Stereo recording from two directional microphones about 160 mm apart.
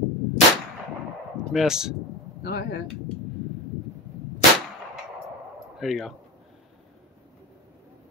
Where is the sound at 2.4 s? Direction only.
75° left (ahead or behind).